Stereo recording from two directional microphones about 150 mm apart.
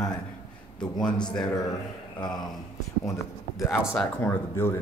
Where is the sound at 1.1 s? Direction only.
30° left (ahead or behind).